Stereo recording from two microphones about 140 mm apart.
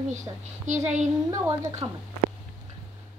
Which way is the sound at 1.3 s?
25° right (ahead or behind).